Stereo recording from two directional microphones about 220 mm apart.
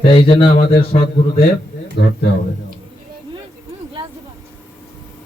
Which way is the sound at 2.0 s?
50° left (ahead or behind).